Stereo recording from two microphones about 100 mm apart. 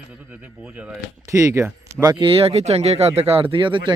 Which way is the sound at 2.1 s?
60° right (ahead or behind).